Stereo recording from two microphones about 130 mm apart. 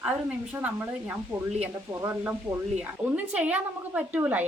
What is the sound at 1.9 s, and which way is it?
A woman's voice, 20° right (ahead or behind).